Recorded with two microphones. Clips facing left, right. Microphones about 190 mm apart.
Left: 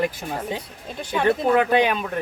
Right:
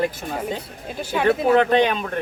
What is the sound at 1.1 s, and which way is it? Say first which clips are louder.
Speech: right 1 dB; 5° right (ahead or behind).